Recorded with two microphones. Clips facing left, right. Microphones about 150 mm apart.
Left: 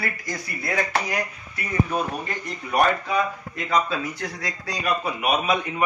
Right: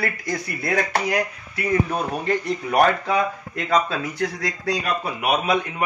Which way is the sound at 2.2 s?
65° right (ahead or behind).